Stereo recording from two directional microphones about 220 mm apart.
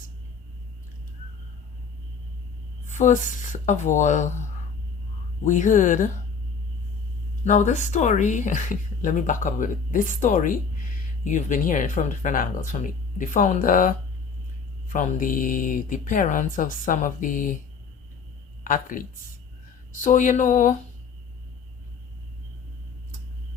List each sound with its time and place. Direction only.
2.8 s speech: 35° left (ahead or behind)
5.5 s speech: 35° left (ahead or behind)
7.4 s speech: 35° left (ahead or behind)
18.6 s speech: 40° left (ahead or behind)